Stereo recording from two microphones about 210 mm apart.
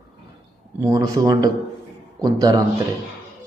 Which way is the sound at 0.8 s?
15° right (ahead or behind).